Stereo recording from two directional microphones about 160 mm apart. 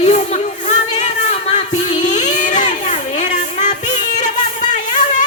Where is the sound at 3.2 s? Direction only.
45° left (ahead or behind).